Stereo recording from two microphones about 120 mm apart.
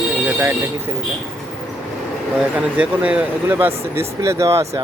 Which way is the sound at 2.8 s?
10° right (ahead or behind).